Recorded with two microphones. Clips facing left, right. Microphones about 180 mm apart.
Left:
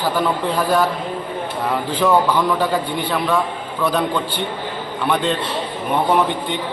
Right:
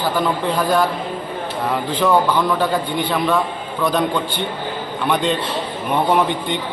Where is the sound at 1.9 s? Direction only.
10° left (ahead or behind).